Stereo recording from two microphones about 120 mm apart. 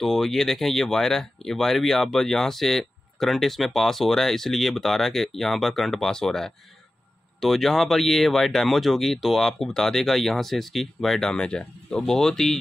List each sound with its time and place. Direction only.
0.0 s speech: centre (ahead or behind)